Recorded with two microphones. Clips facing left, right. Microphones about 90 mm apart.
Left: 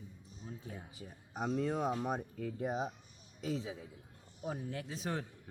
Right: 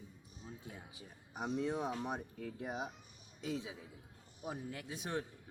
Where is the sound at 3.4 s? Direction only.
40° left (ahead or behind).